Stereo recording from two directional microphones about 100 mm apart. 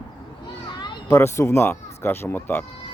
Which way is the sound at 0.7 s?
50° left (ahead or behind).